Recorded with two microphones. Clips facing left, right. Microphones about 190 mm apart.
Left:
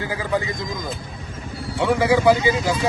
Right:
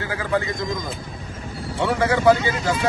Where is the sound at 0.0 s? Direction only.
15° left (ahead or behind).